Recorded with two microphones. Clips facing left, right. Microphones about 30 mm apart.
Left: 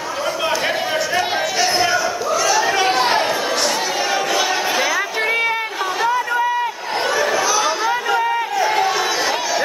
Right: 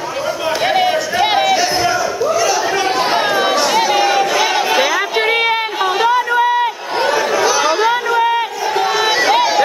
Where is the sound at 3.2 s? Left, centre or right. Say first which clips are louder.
Right 5 dB; right.